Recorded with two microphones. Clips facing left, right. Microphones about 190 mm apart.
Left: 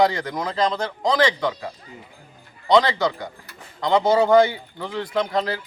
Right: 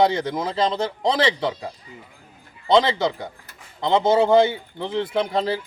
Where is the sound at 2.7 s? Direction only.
25° right (ahead or behind).